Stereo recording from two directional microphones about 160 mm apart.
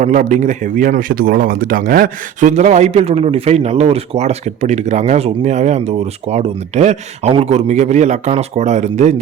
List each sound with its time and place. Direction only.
0.0 s a man's voice: 50° right (ahead or behind)